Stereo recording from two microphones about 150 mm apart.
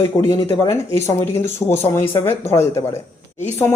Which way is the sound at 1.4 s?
15° left (ahead or behind).